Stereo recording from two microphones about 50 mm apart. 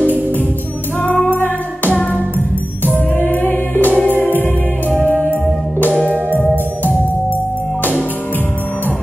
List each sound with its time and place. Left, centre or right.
1.0 s music: left
3.2 s music: left
5.3 s music: left